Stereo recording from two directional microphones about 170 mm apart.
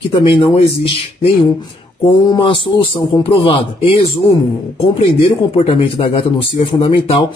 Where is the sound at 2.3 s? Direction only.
30° left (ahead or behind).